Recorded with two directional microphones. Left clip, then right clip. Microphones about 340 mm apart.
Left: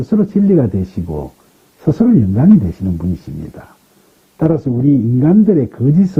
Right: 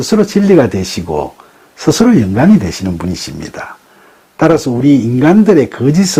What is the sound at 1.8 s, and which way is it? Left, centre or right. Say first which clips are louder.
Speech: right 4 dB; centre.